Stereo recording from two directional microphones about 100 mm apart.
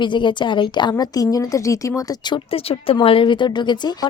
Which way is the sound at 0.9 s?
40° left (ahead or behind).